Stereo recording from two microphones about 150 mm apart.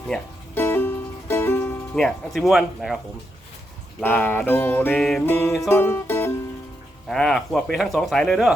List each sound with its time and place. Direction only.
0.5 s music: 15° left (ahead or behind)
2.0 s speech: centre (ahead or behind)
4.0 s music: 10° left (ahead or behind)
5.2 s music: 15° left (ahead or behind)
7.1 s speech: centre (ahead or behind)